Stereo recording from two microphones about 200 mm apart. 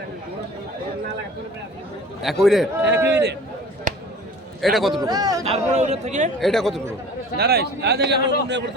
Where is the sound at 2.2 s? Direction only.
Centre (ahead or behind).